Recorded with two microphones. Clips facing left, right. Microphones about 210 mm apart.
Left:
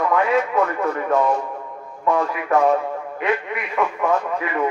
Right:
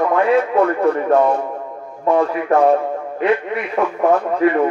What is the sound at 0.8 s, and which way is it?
A man's voice, 30° right (ahead or behind).